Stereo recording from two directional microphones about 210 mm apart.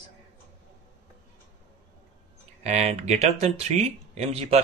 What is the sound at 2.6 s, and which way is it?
Speech, 30° right (ahead or behind).